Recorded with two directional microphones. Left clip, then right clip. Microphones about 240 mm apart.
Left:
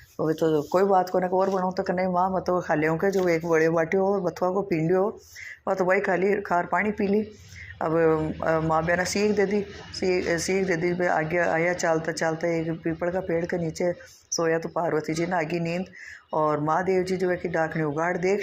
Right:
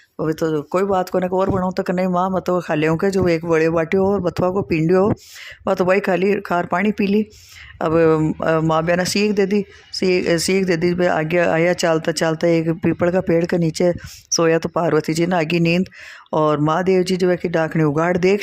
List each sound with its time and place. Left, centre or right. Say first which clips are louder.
0.2 s speech: right 3 dB; right
1.7 s speech: right 5 dB; right
2.2 s speech: right 5 dB; right